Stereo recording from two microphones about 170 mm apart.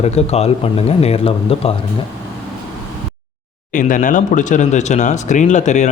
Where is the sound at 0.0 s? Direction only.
40° left (ahead or behind).